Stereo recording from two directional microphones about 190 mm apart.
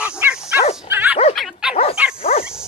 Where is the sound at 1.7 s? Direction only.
35° left (ahead or behind).